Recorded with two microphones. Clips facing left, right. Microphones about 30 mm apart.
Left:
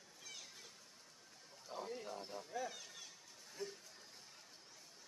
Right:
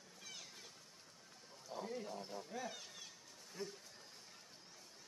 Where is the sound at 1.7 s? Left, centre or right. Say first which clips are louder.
Right 1 dB; centre.